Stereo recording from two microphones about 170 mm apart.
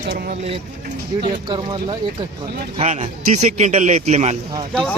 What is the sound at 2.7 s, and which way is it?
Speech, 40° right (ahead or behind).